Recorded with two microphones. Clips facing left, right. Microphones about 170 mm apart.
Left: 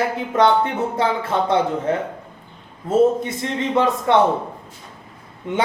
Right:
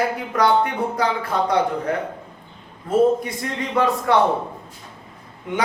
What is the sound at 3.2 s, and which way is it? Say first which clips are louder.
Speech: left 3 dB; 25° left (ahead or behind).